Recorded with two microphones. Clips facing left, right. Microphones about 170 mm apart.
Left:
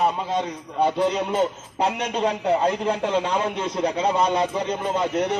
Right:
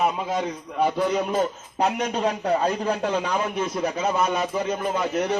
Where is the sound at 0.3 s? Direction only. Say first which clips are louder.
Left 1 dB; 25° left (ahead or behind).